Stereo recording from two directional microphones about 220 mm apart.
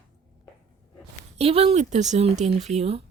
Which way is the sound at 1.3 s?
25° right (ahead or behind).